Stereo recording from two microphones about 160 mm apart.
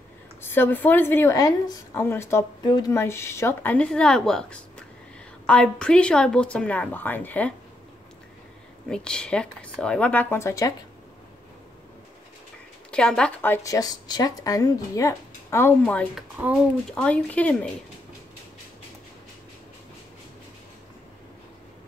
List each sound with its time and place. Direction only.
0.4 s speech: 15° left (ahead or behind)
8.8 s speech: 5° left (ahead or behind)
12.9 s a woman's voice: 5° left (ahead or behind)
16.2 s speech: 10° right (ahead or behind)
16.9 s speech: 10° left (ahead or behind)